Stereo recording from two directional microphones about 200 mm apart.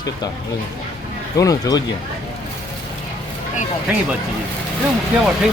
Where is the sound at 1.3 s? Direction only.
15° left (ahead or behind).